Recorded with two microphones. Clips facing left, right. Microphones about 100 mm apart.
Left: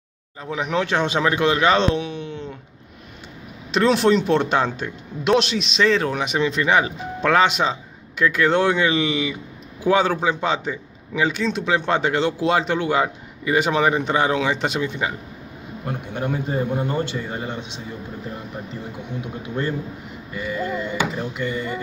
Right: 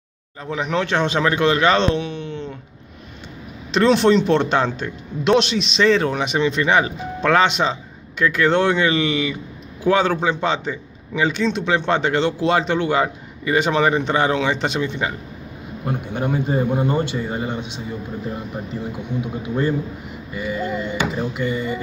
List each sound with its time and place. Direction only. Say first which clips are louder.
0.4 s speech: right 1 dB; 10° left (ahead or behind)
3.7 s speech: right 2 dB; 5° left (ahead or behind)
15.8 s speech: right 3 dB; 15° right (ahead or behind)
20.3 s speech: right 1 dB; 15° right (ahead or behind)